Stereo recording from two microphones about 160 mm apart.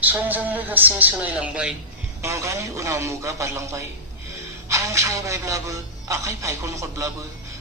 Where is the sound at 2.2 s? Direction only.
20° right (ahead or behind).